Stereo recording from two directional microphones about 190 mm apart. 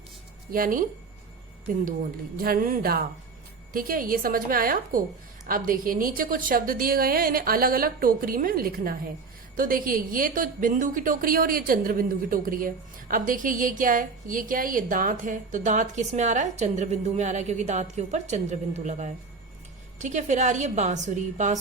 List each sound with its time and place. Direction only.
0.5 s a woman's voice: 45° right (ahead or behind)
2.3 s a woman's voice: 50° right (ahead or behind)